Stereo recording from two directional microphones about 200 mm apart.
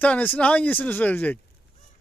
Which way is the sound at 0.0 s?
10° left (ahead or behind).